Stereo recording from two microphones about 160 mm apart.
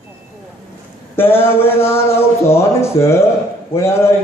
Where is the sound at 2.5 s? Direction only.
15° left (ahead or behind).